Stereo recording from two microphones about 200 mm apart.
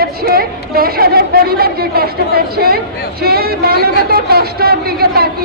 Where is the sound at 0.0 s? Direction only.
50° right (ahead or behind).